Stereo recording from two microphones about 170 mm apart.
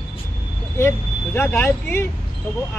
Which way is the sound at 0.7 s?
15° left (ahead or behind).